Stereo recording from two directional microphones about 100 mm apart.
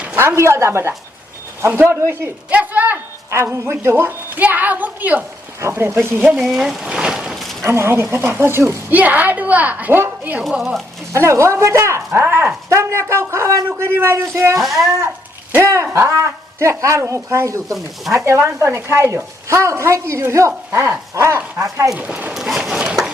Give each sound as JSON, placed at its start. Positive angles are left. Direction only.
{"t": 0.2, "sound": "a man's voice", "side_deg": -25}
{"t": 6.2, "sound": "speech", "side_deg": 0}
{"t": 7.6, "sound": "a man's voice", "side_deg": -25}
{"t": 15.6, "sound": "a man's voice", "side_deg": -30}
{"t": 21.9, "sound": "a woman's voice", "side_deg": -15}